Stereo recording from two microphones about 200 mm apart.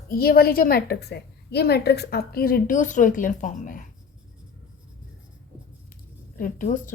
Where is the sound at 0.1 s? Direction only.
50° left (ahead or behind).